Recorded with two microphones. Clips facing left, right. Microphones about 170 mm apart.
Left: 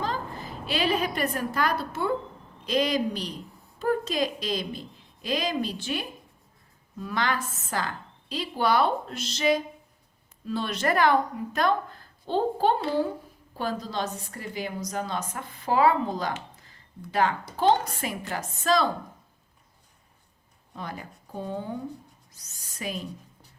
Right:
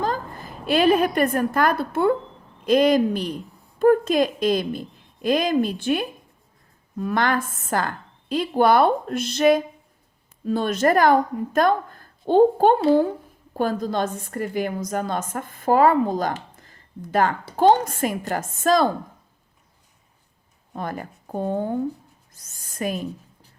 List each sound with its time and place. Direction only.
0.0 s a woman's voice: 50° right (ahead or behind)
20.7 s a woman's voice: 50° right (ahead or behind)